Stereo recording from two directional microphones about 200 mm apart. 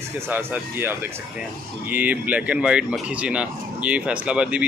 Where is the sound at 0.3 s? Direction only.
10° right (ahead or behind).